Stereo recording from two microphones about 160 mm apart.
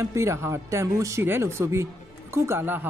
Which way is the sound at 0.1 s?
15° right (ahead or behind).